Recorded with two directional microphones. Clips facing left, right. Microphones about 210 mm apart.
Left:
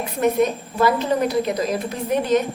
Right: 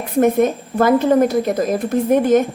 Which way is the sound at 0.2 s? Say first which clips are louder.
Right 5 dB; 50° right (ahead or behind).